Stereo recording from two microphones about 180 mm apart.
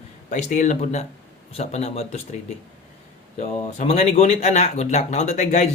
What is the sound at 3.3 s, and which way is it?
Speech, 35° left (ahead or behind).